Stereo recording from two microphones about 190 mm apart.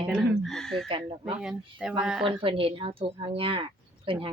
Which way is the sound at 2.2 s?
25° right (ahead or behind).